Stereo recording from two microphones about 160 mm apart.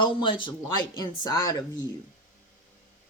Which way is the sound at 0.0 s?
30° left (ahead or behind).